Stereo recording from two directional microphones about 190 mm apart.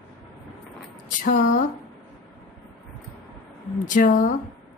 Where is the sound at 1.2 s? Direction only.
45° left (ahead or behind).